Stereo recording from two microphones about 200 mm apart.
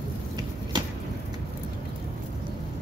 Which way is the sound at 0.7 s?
20° right (ahead or behind).